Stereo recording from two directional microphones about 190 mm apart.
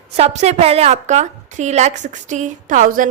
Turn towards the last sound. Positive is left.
turn(degrees=-45)  # may be behind; listen again after turning